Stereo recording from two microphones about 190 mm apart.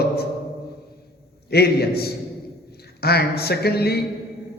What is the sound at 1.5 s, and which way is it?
A man's voice, 55° left (ahead or behind).